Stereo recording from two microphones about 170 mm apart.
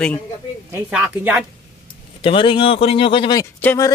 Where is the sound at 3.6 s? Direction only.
10° left (ahead or behind).